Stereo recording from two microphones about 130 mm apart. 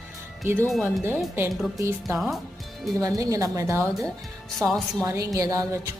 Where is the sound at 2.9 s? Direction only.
25° right (ahead or behind).